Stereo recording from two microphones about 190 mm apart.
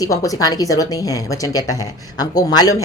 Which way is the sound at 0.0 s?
15° left (ahead or behind).